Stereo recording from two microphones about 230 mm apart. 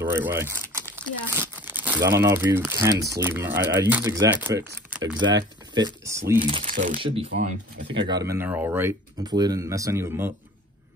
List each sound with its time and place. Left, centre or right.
0.0 s crumpling: centre
2.0 s speech: centre
6.7 s speech: right
7.0 s speech: right